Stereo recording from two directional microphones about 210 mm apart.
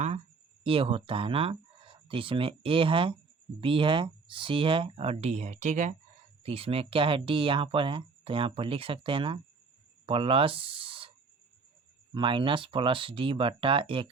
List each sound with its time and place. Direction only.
0.6 s speech: 25° right (ahead or behind)
12.1 s speech: 25° right (ahead or behind)